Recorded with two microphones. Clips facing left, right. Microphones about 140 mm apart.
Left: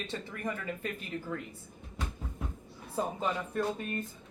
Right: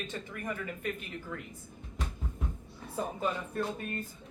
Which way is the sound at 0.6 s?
35° left (ahead or behind).